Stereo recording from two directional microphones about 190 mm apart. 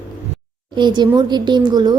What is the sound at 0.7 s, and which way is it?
A woman's voice, 25° right (ahead or behind).